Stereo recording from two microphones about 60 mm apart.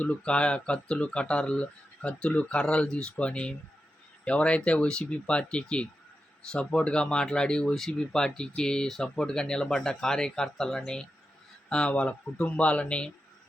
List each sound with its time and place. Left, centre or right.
0.0 s speech: left